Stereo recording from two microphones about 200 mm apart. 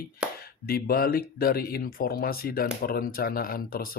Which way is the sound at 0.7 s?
50° left (ahead or behind).